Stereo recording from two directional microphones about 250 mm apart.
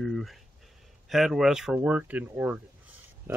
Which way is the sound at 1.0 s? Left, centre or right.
Centre.